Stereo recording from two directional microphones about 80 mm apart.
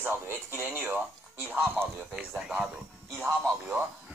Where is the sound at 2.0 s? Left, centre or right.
Centre.